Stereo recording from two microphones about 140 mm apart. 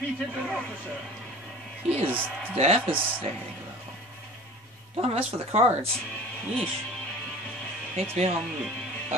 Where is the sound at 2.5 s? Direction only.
50° right (ahead or behind).